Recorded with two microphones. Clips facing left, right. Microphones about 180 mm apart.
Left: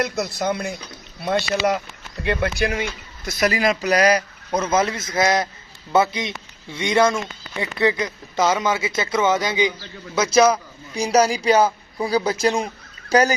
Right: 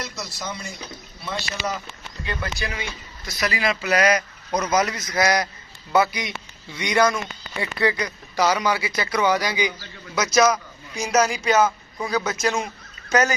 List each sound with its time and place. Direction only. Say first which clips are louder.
0.0 s a man's voice: left 10 dB; 60° left (ahead or behind); by 13.3 s 35° left (ahead or behind)